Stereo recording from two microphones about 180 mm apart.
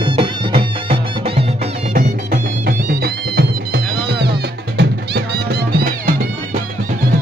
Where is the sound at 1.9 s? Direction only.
55° right (ahead or behind).